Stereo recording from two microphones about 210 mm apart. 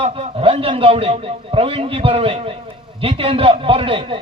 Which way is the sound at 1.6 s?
25° right (ahead or behind).